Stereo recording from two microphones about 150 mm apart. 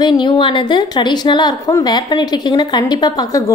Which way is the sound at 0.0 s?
30° left (ahead or behind).